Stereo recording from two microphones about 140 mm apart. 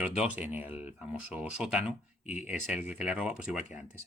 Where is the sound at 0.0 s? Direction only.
10° right (ahead or behind).